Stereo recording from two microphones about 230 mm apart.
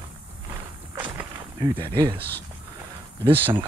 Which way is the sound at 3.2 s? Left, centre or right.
Right.